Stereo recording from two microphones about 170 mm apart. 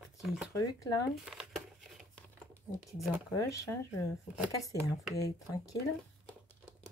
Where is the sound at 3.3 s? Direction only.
20° left (ahead or behind).